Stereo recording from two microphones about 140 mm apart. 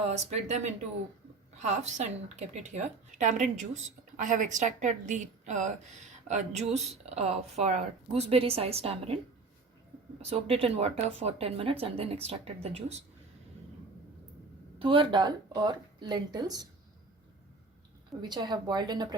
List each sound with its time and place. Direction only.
0.1 s a woman's voice: 55° right (ahead or behind)
10.2 s speech: 45° right (ahead or behind)
14.8 s speech: 35° right (ahead or behind)
18.2 s speech: 30° right (ahead or behind)